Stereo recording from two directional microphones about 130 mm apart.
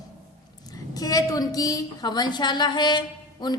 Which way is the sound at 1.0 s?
30° left (ahead or behind).